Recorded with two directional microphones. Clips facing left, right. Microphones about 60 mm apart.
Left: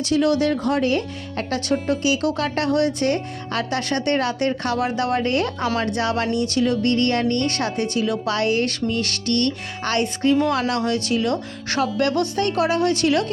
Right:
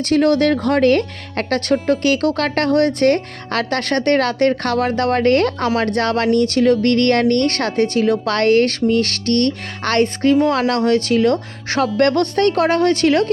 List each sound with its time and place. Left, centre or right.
0.0 s speech: right
9.8 s music: right
10.4 s speech: right